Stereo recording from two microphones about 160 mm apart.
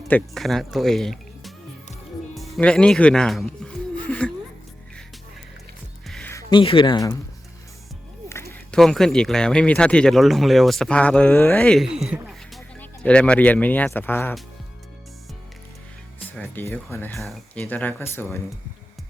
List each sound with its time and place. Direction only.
0.1 s speech: centre (ahead or behind)
2.3 s music: 5° left (ahead or behind)
6.5 s speech: 30° left (ahead or behind)
8.3 s a sound: 15° left (ahead or behind)
8.7 s speech: 5° left (ahead or behind)
16.3 s speech: 5° left (ahead or behind)
17.2 s speech: centre (ahead or behind)